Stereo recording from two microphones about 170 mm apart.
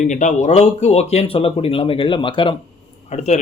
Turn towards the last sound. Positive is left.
turn(degrees=40)  # may be behind; listen again after turning